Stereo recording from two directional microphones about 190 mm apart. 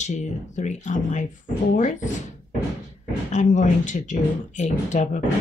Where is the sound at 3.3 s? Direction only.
40° left (ahead or behind).